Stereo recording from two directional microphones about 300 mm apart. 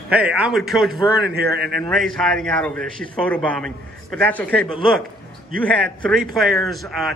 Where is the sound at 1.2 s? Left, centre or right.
Right.